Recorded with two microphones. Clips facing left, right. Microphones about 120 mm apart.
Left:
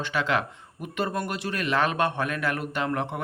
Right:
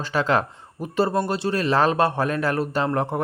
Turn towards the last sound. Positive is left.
turn(degrees=-35)  # may be behind; listen again after turning